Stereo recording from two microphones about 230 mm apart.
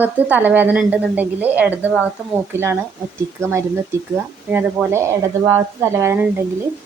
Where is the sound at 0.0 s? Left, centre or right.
Centre.